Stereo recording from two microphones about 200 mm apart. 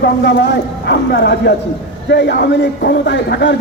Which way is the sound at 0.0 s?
60° left (ahead or behind).